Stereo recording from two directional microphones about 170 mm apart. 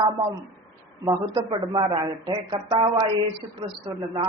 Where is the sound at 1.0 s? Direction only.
25° right (ahead or behind).